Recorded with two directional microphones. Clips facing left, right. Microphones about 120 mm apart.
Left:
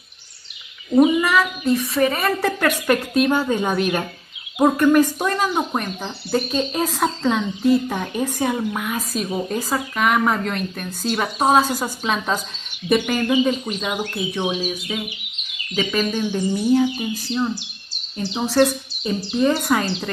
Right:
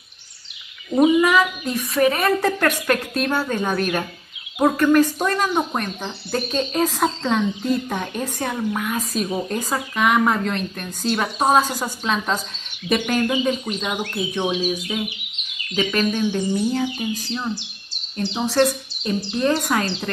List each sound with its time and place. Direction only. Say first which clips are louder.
0.9 s speech: even; centre (ahead or behind)
15.7 s speech: even; centre (ahead or behind)